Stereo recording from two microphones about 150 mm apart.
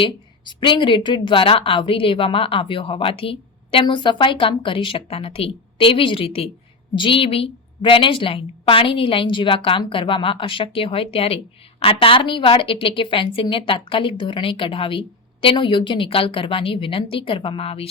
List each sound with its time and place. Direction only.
0.0 s a woman's voice: 35° left (ahead or behind)